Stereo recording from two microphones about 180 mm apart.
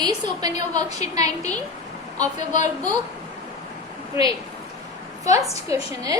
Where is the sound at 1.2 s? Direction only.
40° left (ahead or behind).